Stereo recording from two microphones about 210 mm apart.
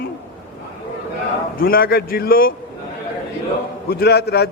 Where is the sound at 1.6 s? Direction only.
45° left (ahead or behind).